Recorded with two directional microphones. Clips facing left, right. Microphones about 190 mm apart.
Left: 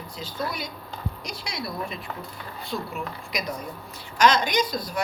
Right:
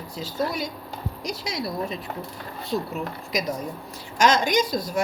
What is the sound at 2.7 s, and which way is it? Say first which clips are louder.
Speech: right 4 dB; 40° right (ahead or behind).